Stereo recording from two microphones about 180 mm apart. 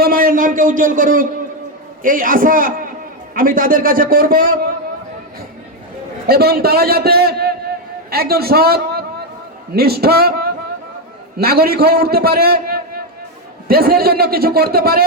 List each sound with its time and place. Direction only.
0.0 s speech: 55° right (ahead or behind)
6.2 s a man's voice: 60° right (ahead or behind)